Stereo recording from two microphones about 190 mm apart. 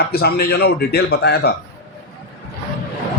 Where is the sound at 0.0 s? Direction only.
55° left (ahead or behind).